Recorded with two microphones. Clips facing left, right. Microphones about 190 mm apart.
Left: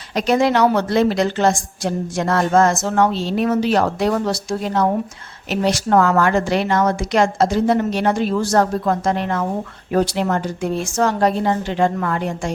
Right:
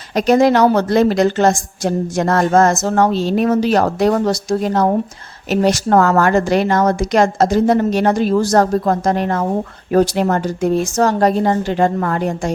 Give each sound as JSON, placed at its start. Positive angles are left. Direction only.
{"t": 0.1, "sound": "a woman's voice", "side_deg": -45}